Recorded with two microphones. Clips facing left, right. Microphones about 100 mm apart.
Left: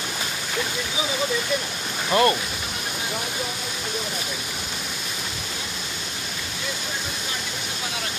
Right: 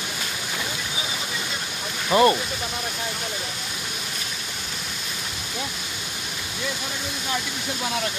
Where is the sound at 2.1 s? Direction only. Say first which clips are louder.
Right 2 dB; 15° right (ahead or behind).